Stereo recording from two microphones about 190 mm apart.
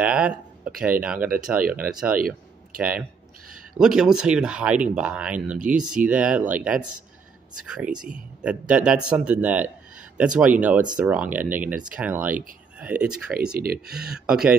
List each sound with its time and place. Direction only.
0.0 s a sound: 5° right (ahead or behind)
1.0 s speech: 5° right (ahead or behind)
2.1 s a sound: 50° right (ahead or behind)
3.7 s speech: 5° right (ahead or behind)
13.5 s speech: 55° right (ahead or behind)
14.1 s speech: 5° right (ahead or behind)